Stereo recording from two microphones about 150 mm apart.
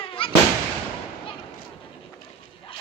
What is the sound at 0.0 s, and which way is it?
Fireworks, 35° left (ahead or behind).